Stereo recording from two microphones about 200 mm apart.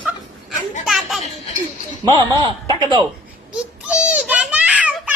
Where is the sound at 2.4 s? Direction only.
20° right (ahead or behind).